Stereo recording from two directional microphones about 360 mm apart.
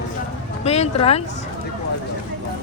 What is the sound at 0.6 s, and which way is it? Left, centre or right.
Speech, centre.